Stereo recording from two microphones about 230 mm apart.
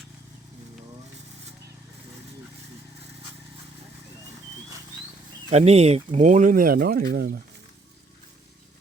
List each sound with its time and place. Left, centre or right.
5.5 s speech: right